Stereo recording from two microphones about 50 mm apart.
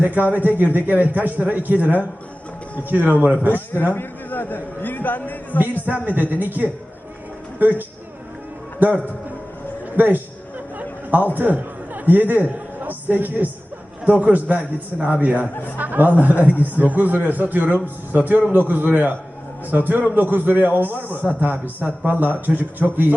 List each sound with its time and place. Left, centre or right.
0.0 s a man's voice: right
3.9 s a man's voice: left
5.8 s a man's voice: right
10.8 s a sound: right
11.3 s a man's voice: right